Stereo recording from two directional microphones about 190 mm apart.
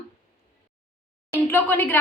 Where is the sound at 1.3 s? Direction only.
10° left (ahead or behind).